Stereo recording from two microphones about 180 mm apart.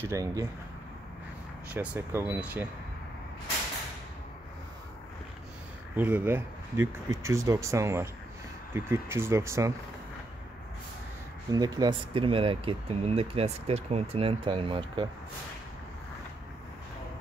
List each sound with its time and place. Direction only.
0.0 s speech: 15° right (ahead or behind)
1.7 s speech: 10° right (ahead or behind)
5.9 s speech: 10° right (ahead or behind)
11.5 s speech: 20° right (ahead or behind)